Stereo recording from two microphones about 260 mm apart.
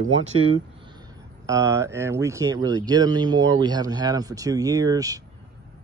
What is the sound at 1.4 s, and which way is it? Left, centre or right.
A man's voice, centre.